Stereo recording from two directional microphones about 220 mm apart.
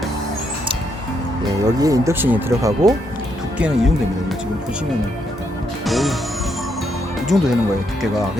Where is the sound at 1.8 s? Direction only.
15° right (ahead or behind).